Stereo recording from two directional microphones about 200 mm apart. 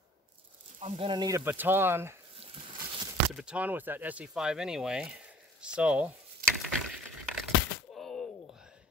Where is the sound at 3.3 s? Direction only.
5° right (ahead or behind).